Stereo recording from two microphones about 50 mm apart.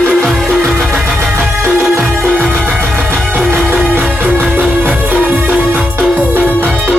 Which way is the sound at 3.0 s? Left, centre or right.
Centre.